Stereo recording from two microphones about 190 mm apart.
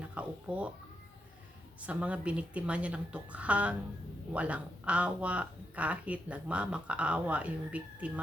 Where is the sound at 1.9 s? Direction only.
5° right (ahead or behind).